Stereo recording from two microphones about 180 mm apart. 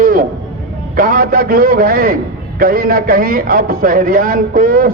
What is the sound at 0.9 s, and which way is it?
A man's voice, 50° right (ahead or behind).